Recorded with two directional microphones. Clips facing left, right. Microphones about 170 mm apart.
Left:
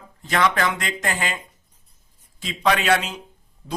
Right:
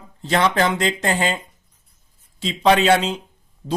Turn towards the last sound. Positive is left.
turn(degrees=-40)  # may be behind; listen again after turning